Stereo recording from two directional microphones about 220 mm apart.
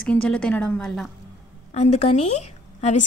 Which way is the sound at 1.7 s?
30° left (ahead or behind).